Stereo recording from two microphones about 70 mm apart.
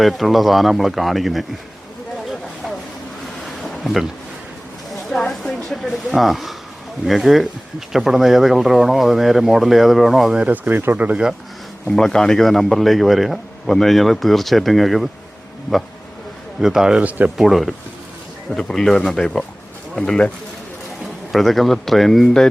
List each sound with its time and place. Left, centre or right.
0.0 s speech: centre
3.4 s a sound: centre
5.1 s a sound: centre
5.6 s speech: centre
10.4 s speech: right
11.9 s speech: centre
16.6 s speech: centre
17.0 s speech: right
17.3 s speech: centre
21.0 s speech: centre